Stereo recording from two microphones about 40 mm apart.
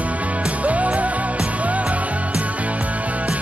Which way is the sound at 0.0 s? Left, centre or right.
Right.